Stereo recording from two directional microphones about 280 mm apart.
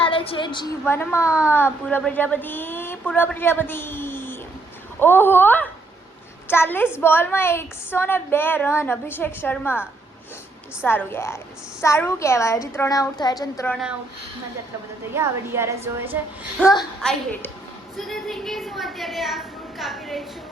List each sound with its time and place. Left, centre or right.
0.0 s a woman's voice: centre
15.1 s a woman's voice: centre
16.6 s a woman's voice: centre